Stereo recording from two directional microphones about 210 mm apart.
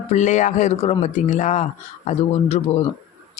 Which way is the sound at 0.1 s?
35° left (ahead or behind).